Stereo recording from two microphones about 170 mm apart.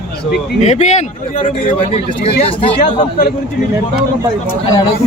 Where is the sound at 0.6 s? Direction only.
40° left (ahead or behind).